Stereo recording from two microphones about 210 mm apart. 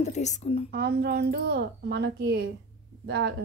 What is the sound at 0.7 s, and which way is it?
A woman's voice, 50° right (ahead or behind).